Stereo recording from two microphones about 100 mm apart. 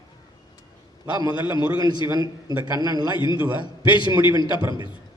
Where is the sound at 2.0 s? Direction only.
40° right (ahead or behind).